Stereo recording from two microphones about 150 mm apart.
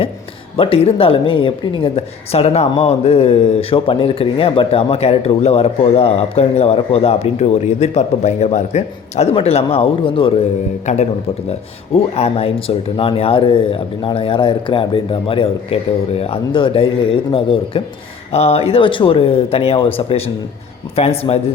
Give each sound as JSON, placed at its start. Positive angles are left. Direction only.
{"t": 0.5, "sound": "speech", "side_deg": 40}
{"t": 10.9, "sound": "a man's voice", "side_deg": 50}
{"t": 12.1, "sound": "speech", "side_deg": 40}